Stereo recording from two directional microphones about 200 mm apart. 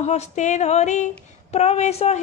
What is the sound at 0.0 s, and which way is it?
Speech, 35° left (ahead or behind).